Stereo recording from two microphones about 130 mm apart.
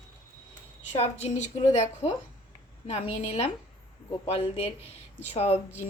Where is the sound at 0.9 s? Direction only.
60° left (ahead or behind).